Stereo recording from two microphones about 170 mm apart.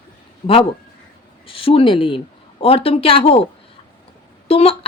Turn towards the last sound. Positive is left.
turn(degrees=35)  # may be behind; listen again after turning